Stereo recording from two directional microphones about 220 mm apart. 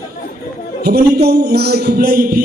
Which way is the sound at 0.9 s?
45° right (ahead or behind).